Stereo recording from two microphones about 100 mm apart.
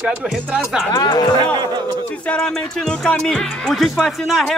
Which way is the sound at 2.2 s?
10° left (ahead or behind).